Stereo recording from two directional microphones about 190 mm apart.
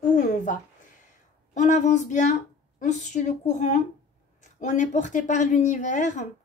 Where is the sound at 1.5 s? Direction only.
40° left (ahead or behind).